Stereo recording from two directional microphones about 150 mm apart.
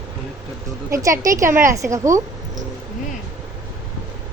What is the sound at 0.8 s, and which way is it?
A woman's voice, 20° right (ahead or behind).